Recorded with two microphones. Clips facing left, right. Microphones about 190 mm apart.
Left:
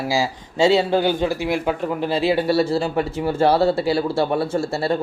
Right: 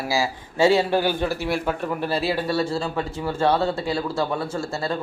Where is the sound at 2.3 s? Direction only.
30° left (ahead or behind).